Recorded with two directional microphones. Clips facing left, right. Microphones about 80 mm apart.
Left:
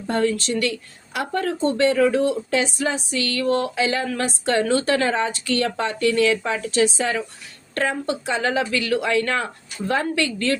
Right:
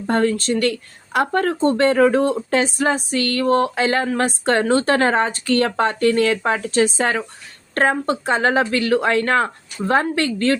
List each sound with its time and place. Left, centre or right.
0.1 s speech: right